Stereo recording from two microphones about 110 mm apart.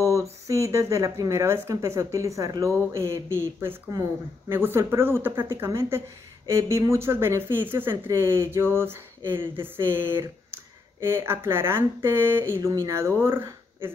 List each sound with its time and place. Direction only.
0.0 s speech: 30° right (ahead or behind)